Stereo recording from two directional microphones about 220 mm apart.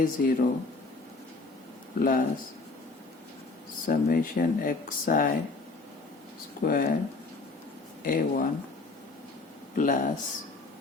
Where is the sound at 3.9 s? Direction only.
40° left (ahead or behind).